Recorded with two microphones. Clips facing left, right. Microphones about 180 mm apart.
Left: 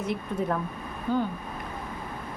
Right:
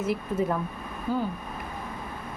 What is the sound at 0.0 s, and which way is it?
A woman's voice, 5° right (ahead or behind).